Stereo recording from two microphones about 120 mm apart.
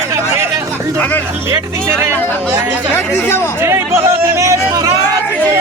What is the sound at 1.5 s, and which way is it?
Speech, 20° right (ahead or behind).